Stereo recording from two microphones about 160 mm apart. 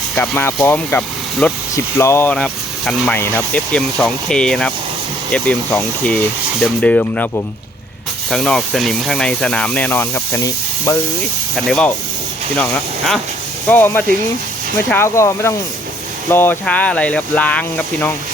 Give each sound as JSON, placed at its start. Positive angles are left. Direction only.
{"t": 0.2, "sound": "speech", "side_deg": 15}
{"t": 11.5, "sound": "speech", "side_deg": 0}